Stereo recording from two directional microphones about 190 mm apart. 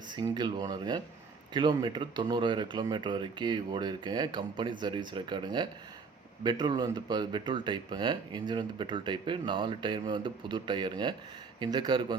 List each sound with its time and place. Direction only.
0.1 s speech: 25° right (ahead or behind)